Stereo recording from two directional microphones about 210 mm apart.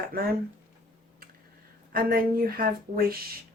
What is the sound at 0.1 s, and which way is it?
Speech, 45° right (ahead or behind).